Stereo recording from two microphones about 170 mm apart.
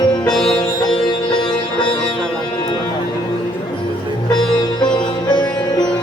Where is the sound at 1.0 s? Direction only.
25° left (ahead or behind).